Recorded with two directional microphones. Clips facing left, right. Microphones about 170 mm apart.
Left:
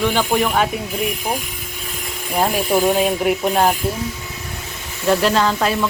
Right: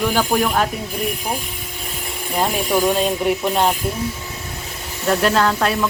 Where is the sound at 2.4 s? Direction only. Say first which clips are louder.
Left 2 dB; 10° left (ahead or behind).